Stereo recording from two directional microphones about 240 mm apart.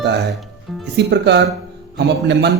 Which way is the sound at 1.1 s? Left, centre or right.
Right.